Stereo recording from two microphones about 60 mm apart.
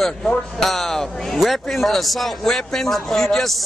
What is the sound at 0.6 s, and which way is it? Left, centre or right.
A man's voice, centre.